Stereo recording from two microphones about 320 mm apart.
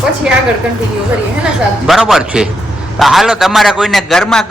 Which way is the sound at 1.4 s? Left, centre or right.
Centre.